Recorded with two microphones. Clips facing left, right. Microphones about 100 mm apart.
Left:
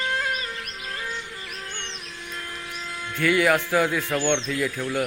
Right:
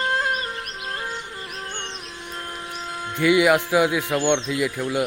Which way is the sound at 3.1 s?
15° right (ahead or behind).